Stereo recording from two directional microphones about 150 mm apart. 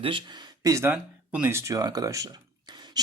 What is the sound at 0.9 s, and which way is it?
Speech, 10° right (ahead or behind).